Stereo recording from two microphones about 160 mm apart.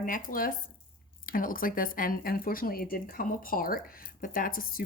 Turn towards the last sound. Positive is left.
turn(degrees=65)  # may be behind; listen again after turning